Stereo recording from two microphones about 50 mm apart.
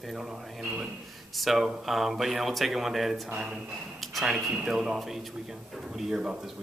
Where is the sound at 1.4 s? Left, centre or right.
Centre.